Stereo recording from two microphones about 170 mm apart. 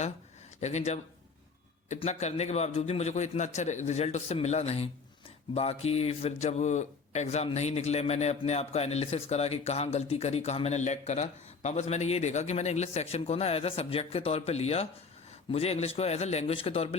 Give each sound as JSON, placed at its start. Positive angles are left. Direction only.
{"t": 0.6, "sound": "speech", "side_deg": 40}